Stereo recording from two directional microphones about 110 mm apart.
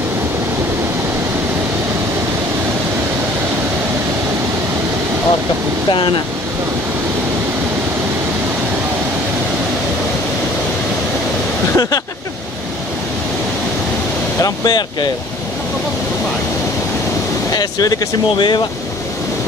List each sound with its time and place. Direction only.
11.7 s speech: 35° left (ahead or behind)
14.4 s speech: 40° left (ahead or behind)
17.5 s speech: 35° left (ahead or behind)